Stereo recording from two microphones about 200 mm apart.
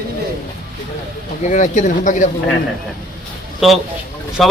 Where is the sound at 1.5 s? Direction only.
40° left (ahead or behind).